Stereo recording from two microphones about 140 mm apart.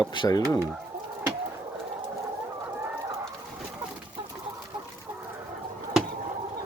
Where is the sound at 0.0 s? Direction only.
30° left (ahead or behind).